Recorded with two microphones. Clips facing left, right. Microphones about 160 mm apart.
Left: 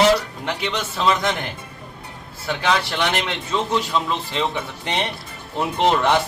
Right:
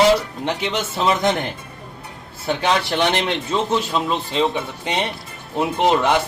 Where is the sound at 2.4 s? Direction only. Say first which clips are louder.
Right 2 dB; 25° right (ahead or behind).